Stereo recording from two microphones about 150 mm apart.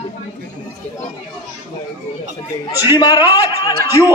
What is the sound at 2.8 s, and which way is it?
A man's voice, 25° left (ahead or behind).